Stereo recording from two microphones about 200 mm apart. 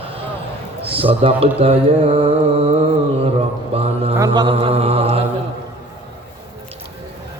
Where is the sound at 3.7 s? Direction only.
30° right (ahead or behind).